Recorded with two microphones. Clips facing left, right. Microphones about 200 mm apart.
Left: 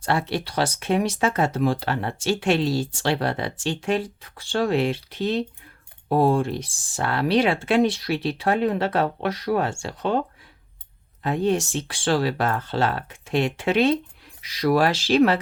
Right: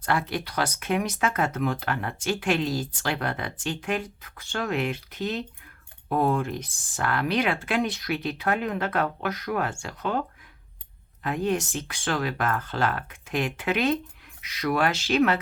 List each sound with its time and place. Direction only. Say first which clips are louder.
0.0 s speech: left 3 dB; 30° left (ahead or behind)